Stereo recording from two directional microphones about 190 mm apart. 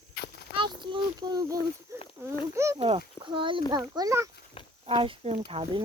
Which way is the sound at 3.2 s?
25° right (ahead or behind).